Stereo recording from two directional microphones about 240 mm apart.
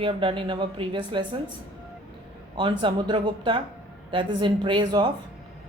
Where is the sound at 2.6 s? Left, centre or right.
Centre.